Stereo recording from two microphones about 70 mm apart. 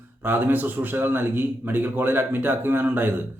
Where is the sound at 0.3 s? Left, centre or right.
Right.